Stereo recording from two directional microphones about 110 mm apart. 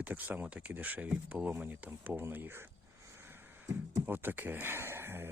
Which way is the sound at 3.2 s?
20° right (ahead or behind).